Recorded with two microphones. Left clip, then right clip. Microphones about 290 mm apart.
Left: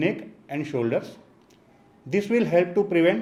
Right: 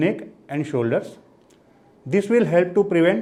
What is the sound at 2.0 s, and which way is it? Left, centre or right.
A man's voice, right.